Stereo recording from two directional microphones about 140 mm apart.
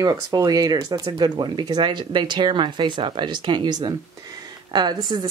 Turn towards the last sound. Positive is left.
turn(degrees=-30)  # may be behind; listen again after turning